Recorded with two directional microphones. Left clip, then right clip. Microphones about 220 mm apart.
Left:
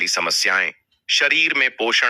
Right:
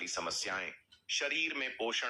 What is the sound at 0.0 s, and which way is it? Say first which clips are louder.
A man's voice: left 18 dB; 40° left (ahead or behind).